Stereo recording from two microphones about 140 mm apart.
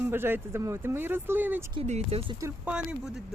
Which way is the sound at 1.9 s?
50° right (ahead or behind).